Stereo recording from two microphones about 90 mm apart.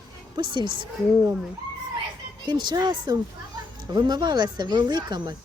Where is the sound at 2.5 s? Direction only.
50° right (ahead or behind).